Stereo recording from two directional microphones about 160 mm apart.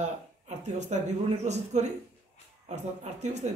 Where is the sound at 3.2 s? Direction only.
45° right (ahead or behind).